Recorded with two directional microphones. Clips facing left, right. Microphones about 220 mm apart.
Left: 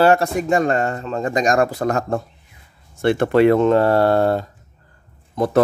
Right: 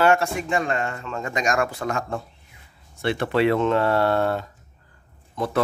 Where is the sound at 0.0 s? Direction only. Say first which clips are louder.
Left 5 dB; 35° left (ahead or behind).